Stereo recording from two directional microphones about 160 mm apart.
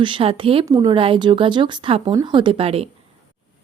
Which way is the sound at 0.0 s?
35° right (ahead or behind).